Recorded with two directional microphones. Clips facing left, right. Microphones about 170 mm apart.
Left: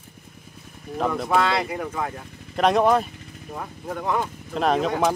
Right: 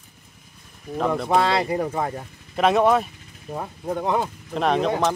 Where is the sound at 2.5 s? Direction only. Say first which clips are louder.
Right 1 dB; centre (ahead or behind).